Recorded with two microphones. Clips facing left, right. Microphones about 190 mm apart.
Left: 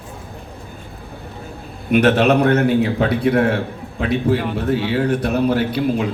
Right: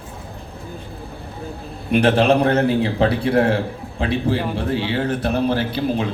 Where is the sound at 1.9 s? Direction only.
30° right (ahead or behind).